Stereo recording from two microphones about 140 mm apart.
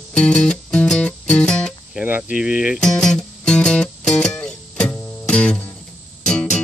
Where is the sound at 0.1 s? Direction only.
5° left (ahead or behind).